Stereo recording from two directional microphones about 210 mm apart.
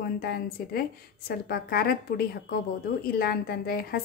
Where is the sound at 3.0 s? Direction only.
45° left (ahead or behind).